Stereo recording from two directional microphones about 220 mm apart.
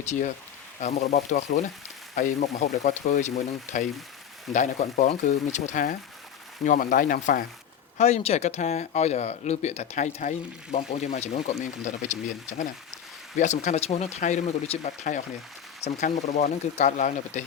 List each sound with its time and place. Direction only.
0.0 s speech: 30° left (ahead or behind)